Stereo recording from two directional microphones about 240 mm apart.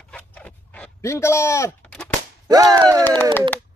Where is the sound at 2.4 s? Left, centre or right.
Centre.